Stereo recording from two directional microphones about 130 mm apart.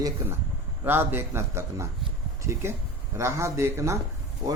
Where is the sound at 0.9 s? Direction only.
15° right (ahead or behind).